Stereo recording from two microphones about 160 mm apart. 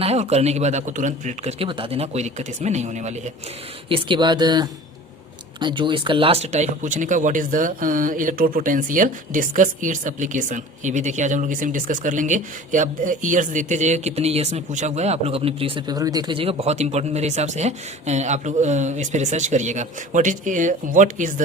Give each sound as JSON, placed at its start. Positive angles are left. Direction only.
{"t": 0.0, "sound": "speech", "side_deg": -40}
{"t": 1.5, "sound": "speech", "side_deg": -35}
{"t": 3.8, "sound": "speech", "side_deg": -35}